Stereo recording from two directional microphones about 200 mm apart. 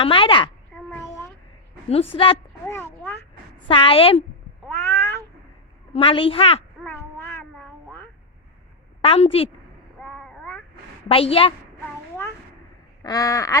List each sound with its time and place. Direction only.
0.0 s a woman's voice: 25° left (ahead or behind)
0.9 s a sound: 15° left (ahead or behind)
1.9 s a woman's voice: 30° left (ahead or behind)
2.6 s a sound: 10° left (ahead or behind)
3.7 s a woman's voice: 30° left (ahead or behind)
4.6 s cat: 10° left (ahead or behind)
5.9 s a woman's voice: 25° left (ahead or behind)
6.8 s child singing: 10° left (ahead or behind)
9.0 s a woman's voice: 30° left (ahead or behind)
10.0 s a sound: centre (ahead or behind)
11.1 s a woman's voice: 30° left (ahead or behind)
13.0 s a sound: 15° left (ahead or behind)